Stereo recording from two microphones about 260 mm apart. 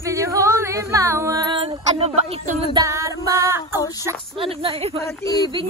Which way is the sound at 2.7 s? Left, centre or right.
Centre.